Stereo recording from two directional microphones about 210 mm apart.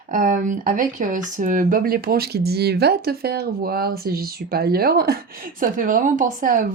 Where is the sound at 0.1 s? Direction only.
40° right (ahead or behind).